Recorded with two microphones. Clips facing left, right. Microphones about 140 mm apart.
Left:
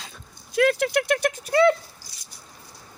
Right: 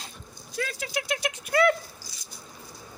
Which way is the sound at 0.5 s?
65° left (ahead or behind).